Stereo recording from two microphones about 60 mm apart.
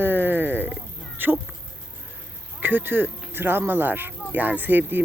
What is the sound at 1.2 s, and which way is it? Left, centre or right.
Speech, right.